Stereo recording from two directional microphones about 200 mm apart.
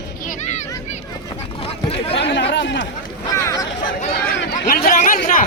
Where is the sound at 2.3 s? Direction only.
60° left (ahead or behind).